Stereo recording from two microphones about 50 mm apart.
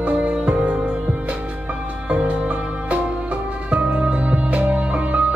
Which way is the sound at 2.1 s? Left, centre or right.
Right.